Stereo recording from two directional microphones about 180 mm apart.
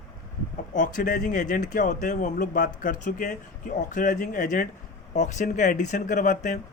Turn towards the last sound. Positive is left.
turn(degrees=40)  # may be behind; listen again after turning